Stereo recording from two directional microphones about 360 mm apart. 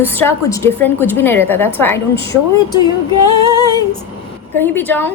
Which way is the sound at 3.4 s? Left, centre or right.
Centre.